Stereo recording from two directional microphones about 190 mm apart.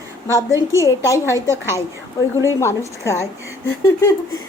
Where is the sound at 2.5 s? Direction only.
15° left (ahead or behind).